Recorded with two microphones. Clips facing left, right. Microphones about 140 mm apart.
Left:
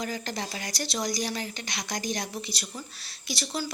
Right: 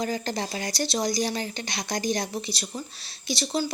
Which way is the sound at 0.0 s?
30° right (ahead or behind).